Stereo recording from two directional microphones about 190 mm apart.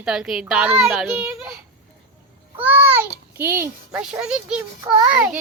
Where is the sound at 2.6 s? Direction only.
10° right (ahead or behind).